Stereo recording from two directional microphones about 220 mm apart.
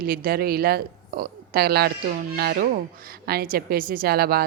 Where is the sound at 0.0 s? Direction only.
40° right (ahead or behind).